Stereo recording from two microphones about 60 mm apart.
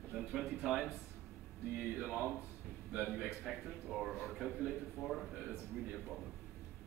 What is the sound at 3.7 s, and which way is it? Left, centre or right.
Speech, centre.